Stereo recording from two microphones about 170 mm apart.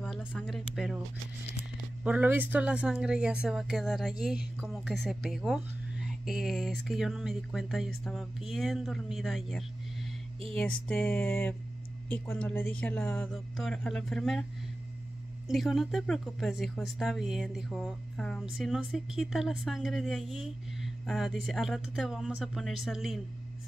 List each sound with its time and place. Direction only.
0.2 s speech: 10° left (ahead or behind)
2.0 s speech: 10° right (ahead or behind)
10.5 s a sound: 5° left (ahead or behind)
12.1 s speech: 10° left (ahead or behind)
15.4 s speech: centre (ahead or behind)